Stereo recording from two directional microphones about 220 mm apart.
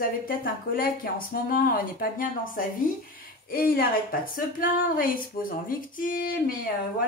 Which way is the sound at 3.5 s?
40° left (ahead or behind).